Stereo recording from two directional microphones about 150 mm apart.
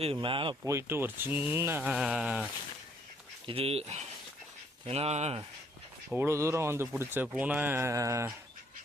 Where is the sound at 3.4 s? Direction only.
40° right (ahead or behind).